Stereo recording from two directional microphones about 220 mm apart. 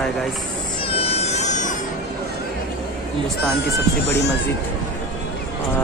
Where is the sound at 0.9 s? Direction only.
30° left (ahead or behind).